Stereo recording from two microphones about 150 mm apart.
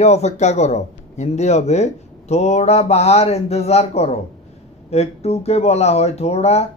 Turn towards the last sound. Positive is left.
turn(degrees=45)  # may be behind; listen again after turning